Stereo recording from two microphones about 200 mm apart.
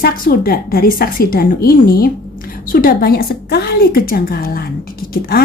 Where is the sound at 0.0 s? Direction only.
50° left (ahead or behind).